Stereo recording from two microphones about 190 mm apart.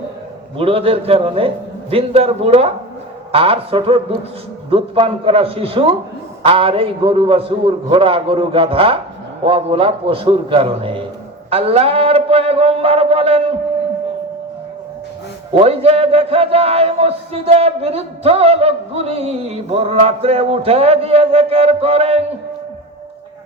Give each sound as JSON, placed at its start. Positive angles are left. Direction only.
{"t": 0.5, "sound": "a man's voice", "side_deg": -30}
{"t": 15.6, "sound": "speech", "side_deg": -30}